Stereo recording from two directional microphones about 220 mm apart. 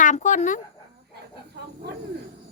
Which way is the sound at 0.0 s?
35° left (ahead or behind).